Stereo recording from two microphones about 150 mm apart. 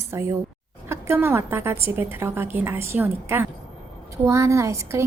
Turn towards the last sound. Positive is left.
turn(degrees=-20)  # may be behind; listen again after turning